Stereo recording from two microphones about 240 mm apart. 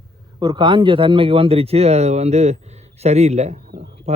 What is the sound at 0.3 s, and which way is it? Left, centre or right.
A man's voice, centre.